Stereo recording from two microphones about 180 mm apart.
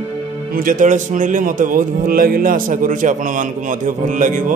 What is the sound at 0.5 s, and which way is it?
Speech, 50° right (ahead or behind).